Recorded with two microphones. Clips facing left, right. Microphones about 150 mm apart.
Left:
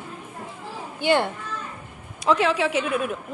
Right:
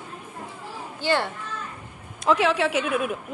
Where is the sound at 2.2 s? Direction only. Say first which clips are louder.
Even; centre (ahead or behind).